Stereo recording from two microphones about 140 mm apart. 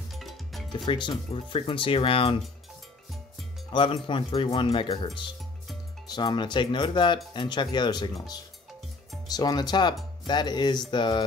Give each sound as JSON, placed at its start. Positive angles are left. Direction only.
{"t": 0.1, "sound": "music", "side_deg": 0}
{"t": 0.7, "sound": "speech", "side_deg": 35}
{"t": 3.7, "sound": "speech", "side_deg": 35}